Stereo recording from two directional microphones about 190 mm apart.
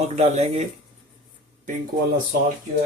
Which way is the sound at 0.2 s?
35° right (ahead or behind).